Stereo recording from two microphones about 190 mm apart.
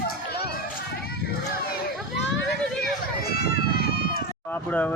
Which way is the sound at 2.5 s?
55° left (ahead or behind).